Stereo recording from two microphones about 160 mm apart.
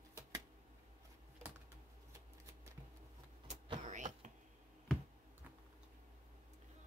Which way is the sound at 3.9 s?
50° right (ahead or behind).